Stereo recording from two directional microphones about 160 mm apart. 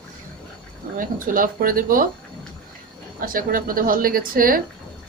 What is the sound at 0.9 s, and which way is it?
Speech, 60° right (ahead or behind).